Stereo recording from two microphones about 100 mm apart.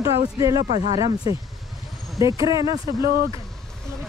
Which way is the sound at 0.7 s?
90° right.